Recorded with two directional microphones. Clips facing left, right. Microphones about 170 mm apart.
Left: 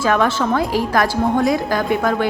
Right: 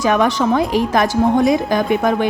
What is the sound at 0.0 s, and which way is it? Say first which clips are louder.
A woman's voice: right 2 dB; 15° right (ahead or behind).